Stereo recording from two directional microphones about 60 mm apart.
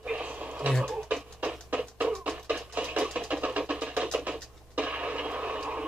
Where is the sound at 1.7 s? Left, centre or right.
Right.